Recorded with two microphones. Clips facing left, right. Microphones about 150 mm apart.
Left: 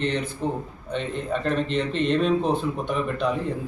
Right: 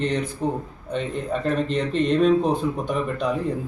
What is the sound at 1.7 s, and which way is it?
Speech, 40° right (ahead or behind).